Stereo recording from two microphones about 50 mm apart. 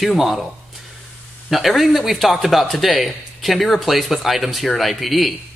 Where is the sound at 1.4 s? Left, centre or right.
Centre.